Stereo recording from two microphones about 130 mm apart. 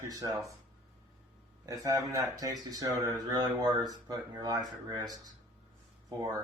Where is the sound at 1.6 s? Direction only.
25° right (ahead or behind).